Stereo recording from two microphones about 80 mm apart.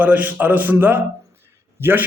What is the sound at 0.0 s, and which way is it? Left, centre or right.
A man's voice, right.